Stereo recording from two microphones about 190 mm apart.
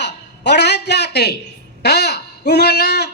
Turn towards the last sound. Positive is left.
turn(degrees=60)  # may be behind; listen again after turning